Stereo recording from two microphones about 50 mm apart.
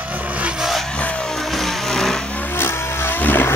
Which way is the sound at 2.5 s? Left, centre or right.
Left.